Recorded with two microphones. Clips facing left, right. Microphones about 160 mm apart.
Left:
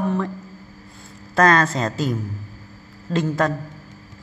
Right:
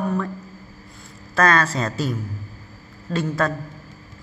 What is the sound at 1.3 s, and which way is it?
A woman's voice, 25° left (ahead or behind).